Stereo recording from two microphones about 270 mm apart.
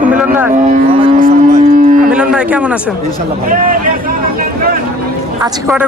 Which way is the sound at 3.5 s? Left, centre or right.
Right.